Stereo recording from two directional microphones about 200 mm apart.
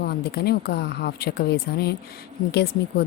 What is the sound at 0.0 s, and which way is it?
A woman's voice, 50° left (ahead or behind).